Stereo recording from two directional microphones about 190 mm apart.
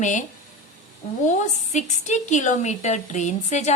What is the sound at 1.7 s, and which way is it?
A woman's voice, 40° left (ahead or behind).